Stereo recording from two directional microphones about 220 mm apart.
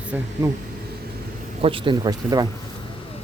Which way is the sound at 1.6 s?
25° right (ahead or behind).